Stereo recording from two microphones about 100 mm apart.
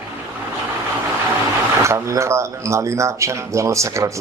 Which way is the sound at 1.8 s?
30° right (ahead or behind).